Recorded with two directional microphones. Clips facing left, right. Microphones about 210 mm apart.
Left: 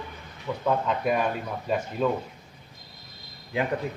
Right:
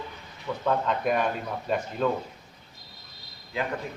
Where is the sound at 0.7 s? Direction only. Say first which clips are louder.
Left 1 dB; 5° left (ahead or behind).